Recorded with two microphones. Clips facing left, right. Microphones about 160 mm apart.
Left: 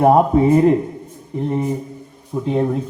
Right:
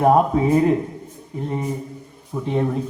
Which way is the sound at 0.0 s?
30° left (ahead or behind).